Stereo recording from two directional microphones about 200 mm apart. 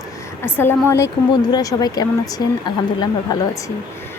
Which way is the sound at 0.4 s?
10° left (ahead or behind).